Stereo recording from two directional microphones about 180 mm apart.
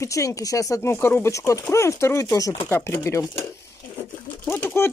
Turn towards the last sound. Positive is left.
turn(degrees=15)  # may be behind; listen again after turning